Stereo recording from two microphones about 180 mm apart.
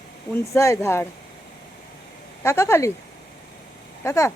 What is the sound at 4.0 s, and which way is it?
Speech, 15° left (ahead or behind).